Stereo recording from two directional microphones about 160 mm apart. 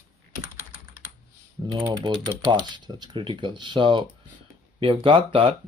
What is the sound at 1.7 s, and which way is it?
Speech, 25° right (ahead or behind).